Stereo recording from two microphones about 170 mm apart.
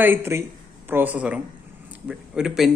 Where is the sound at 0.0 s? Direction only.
15° right (ahead or behind).